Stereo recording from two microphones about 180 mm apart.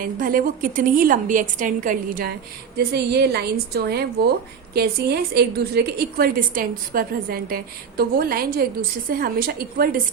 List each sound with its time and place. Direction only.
0.0 s a woman's voice: 50° right (ahead or behind)
2.7 s a woman's voice: 60° right (ahead or behind)